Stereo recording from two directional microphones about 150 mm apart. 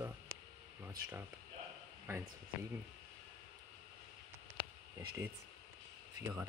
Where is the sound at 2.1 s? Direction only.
15° right (ahead or behind).